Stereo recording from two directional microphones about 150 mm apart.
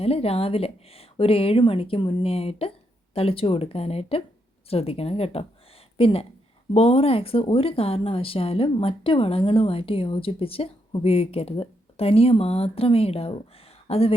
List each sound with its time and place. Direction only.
0.0 s speech: 40° left (ahead or behind)